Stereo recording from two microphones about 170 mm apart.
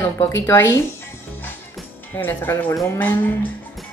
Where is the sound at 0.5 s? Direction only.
15° left (ahead or behind).